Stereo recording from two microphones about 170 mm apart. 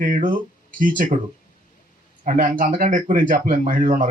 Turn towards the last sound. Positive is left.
turn(degrees=-50)  # may be behind; listen again after turning